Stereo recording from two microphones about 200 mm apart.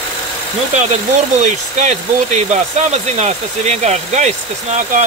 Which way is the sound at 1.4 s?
35° right (ahead or behind).